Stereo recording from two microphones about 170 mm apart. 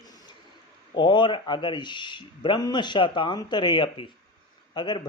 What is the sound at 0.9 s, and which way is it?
Speech, 30° left (ahead or behind).